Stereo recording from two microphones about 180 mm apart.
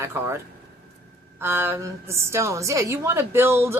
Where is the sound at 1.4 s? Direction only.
15° right (ahead or behind).